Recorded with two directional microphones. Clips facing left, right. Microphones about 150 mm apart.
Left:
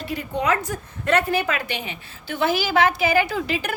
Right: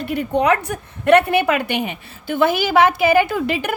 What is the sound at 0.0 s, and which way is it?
A woman's voice, 60° right (ahead or behind).